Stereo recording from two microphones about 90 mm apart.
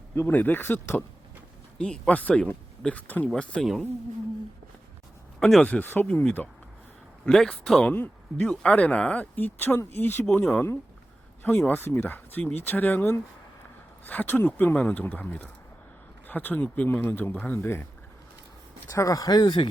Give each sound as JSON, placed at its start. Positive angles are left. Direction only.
{"t": 0.1, "sound": "speech", "side_deg": 25}
{"t": 1.8, "sound": "speech", "side_deg": 10}
{"t": 5.4, "sound": "speech", "side_deg": 5}
{"t": 5.6, "sound": "speech", "side_deg": 20}
{"t": 7.3, "sound": "speech", "side_deg": 5}
{"t": 7.9, "sound": "speech", "side_deg": 20}
{"t": 18.9, "sound": "speech", "side_deg": 35}